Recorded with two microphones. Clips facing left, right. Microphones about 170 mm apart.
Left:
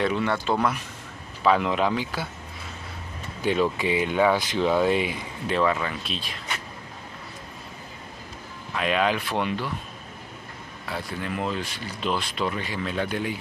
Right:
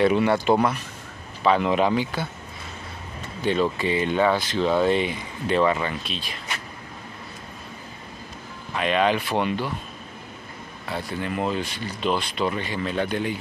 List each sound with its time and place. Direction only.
0.0 s speech: 10° right (ahead or behind)
1.4 s speech: centre (ahead or behind)
3.7 s speech: 10° left (ahead or behind)
8.7 s speech: centre (ahead or behind)
10.9 s speech: centre (ahead or behind)